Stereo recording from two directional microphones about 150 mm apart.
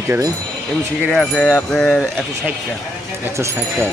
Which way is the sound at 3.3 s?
15° right (ahead or behind).